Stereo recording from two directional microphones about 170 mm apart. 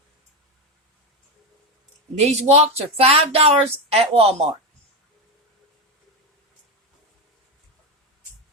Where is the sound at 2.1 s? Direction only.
40° right (ahead or behind).